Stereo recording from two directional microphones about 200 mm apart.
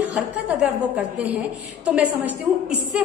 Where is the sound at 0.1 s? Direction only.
5° right (ahead or behind).